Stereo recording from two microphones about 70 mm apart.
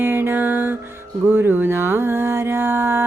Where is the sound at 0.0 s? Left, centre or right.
Right.